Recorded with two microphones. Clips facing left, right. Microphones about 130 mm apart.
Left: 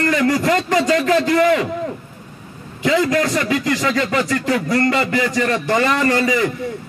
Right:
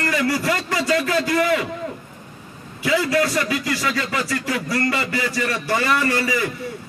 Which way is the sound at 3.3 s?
20° left (ahead or behind).